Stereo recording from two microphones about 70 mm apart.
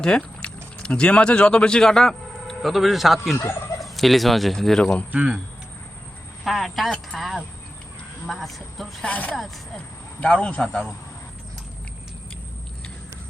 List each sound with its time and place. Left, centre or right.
0.0 s speech: centre
3.8 s turkey: centre
5.1 s speech: right
6.4 s speech: centre
9.0 s speech: centre